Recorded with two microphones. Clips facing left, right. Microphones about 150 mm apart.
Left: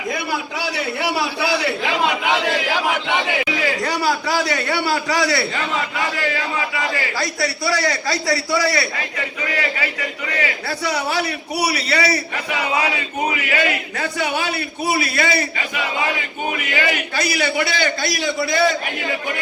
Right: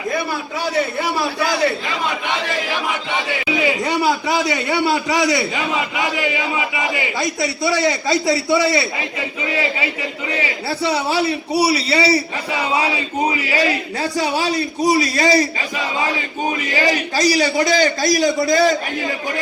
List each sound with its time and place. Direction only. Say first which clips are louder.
3.6 s a man's voice: right 3 dB; 20° right (ahead or behind)
16.6 s a man's voice: right 3 dB; 35° right (ahead or behind)